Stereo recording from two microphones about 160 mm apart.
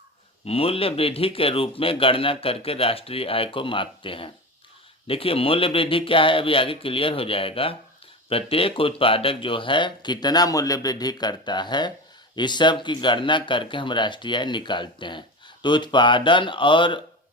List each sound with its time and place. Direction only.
0.4 s speech: 35° left (ahead or behind)